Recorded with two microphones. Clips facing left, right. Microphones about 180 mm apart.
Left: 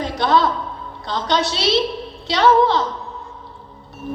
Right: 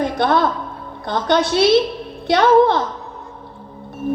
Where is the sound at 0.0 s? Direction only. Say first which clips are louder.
Right 1 dB; 55° right (ahead or behind).